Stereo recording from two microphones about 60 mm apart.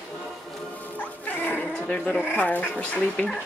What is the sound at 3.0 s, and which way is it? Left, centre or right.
Speech, centre.